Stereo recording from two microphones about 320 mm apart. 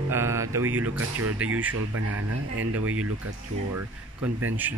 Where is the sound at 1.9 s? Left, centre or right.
Right.